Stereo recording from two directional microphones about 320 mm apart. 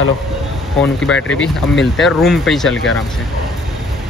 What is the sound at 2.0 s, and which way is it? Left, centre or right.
Speech, centre.